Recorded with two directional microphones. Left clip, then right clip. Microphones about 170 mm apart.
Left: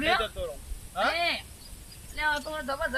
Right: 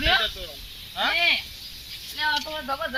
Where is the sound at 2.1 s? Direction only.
20° left (ahead or behind).